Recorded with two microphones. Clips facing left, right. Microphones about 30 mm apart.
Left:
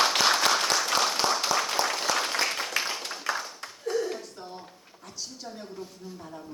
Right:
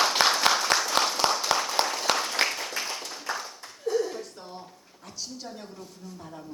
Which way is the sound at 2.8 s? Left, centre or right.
Left.